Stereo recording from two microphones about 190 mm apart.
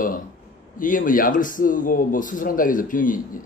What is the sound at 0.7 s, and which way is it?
Speech, 45° left (ahead or behind).